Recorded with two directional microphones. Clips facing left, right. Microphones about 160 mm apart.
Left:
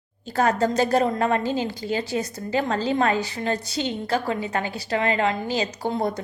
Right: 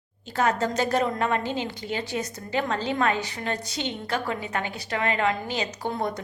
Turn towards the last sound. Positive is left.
turn(degrees=30)  # may be behind; listen again after turning